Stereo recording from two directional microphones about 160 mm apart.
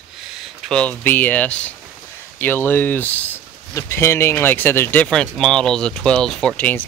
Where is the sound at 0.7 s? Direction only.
5° left (ahead or behind).